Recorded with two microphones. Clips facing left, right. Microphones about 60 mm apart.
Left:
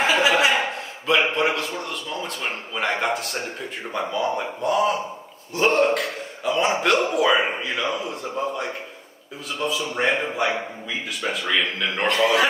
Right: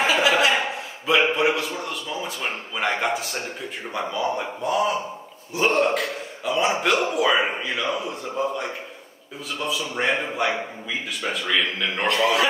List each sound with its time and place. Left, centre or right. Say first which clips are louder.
0.2 s chuckle: even; left
1.0 s a man's voice: right 1 dB; centre
12.1 s a man's voice: left 1 dB; left